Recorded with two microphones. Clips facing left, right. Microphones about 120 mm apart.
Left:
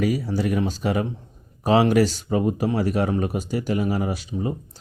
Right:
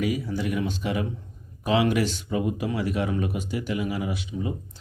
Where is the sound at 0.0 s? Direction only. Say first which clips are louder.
Left 4 dB; 40° left (ahead or behind).